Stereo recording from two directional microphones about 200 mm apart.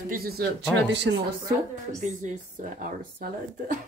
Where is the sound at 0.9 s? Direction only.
60° right (ahead or behind).